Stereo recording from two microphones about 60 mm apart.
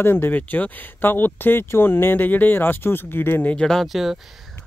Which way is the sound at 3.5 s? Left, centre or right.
Centre.